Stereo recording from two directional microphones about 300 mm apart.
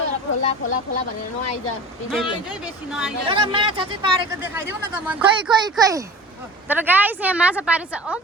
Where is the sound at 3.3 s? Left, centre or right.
Centre.